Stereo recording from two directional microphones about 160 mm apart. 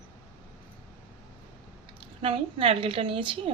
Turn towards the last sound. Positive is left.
turn(degrees=-30)  # may be behind; listen again after turning